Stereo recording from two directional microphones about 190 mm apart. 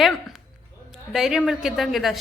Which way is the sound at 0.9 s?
Centre (ahead or behind).